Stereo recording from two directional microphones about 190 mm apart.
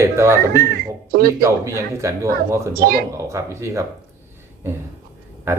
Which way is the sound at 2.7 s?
50° right (ahead or behind).